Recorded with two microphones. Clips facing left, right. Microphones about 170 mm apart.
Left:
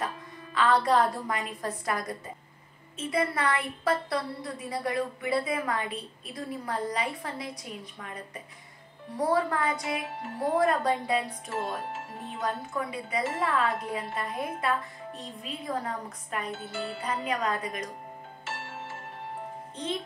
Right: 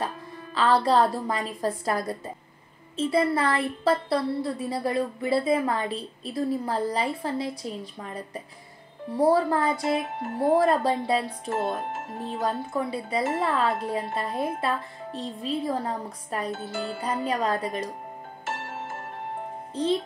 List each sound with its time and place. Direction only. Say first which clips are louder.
0.6 s a woman's voice: right 3 dB; 30° right (ahead or behind)
18.4 s music: right 5 dB; 45° right (ahead or behind)
19.7 s a child's voice: right 9 dB; 35° right (ahead or behind)